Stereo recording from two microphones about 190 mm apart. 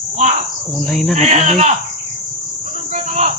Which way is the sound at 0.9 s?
Centre (ahead or behind).